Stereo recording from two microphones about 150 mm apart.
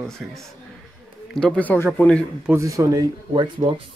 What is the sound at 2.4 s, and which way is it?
Speech, 20° right (ahead or behind).